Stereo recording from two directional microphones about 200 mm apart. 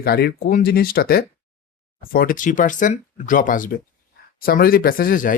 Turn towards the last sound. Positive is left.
turn(degrees=45)  # may be behind; listen again after turning